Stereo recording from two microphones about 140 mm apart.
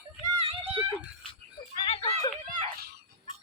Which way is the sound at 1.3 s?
40° left (ahead or behind).